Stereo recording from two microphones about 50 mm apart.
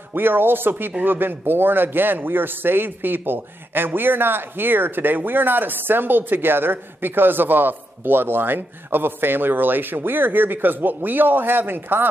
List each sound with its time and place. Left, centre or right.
0.1 s speech: right